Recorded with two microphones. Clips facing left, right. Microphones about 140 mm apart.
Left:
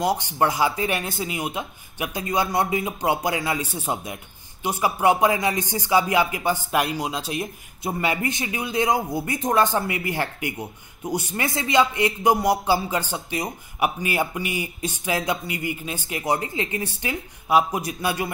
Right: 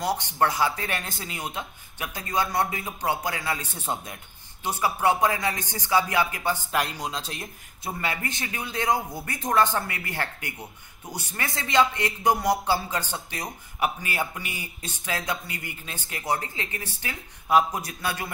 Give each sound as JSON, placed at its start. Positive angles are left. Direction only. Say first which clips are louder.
{"t": 0.0, "sound": "speech", "louder": "left 3 dB", "side_deg": 15}
{"t": 17.5, "sound": "speech", "louder": "left 2 dB", "side_deg": 10}